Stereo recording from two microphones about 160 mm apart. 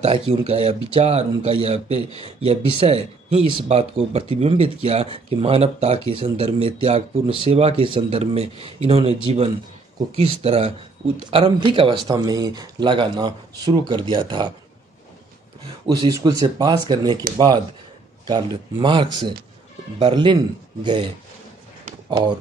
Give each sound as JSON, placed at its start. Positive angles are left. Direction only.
{"t": 0.3, "sound": "speech", "side_deg": -40}
{"t": 15.9, "sound": "speech", "side_deg": -20}
{"t": 18.2, "sound": "speech", "side_deg": -30}